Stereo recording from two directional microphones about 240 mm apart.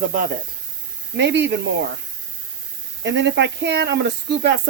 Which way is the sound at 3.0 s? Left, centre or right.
Right.